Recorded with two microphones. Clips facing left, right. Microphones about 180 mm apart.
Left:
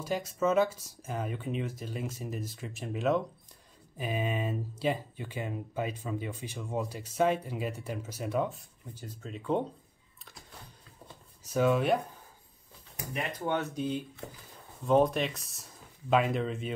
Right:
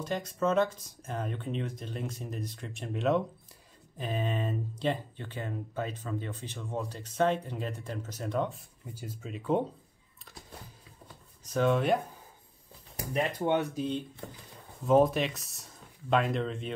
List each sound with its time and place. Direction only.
0.0 s speech: 5° left (ahead or behind)
11.4 s speech: 5° left (ahead or behind)
12.9 s speech: 35° right (ahead or behind)
13.7 s speech: 5° left (ahead or behind)